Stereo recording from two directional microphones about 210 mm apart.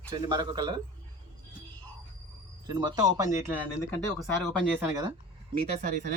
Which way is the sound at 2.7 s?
20° right (ahead or behind).